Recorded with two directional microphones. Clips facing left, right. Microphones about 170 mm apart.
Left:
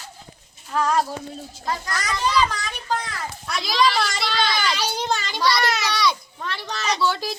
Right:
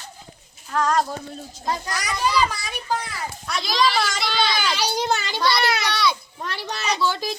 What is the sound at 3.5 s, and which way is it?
A child's voice, centre (ahead or behind).